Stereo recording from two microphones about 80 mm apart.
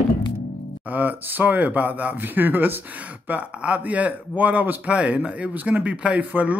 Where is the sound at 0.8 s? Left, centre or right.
Right.